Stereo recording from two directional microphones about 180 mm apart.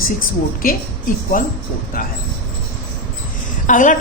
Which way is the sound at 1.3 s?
50° left (ahead or behind).